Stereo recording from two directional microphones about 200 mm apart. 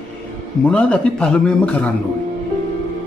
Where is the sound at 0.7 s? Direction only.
5° left (ahead or behind).